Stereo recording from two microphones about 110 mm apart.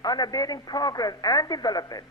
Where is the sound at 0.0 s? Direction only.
35° left (ahead or behind).